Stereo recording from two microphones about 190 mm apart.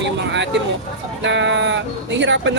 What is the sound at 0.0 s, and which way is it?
Speech, 65° right (ahead or behind).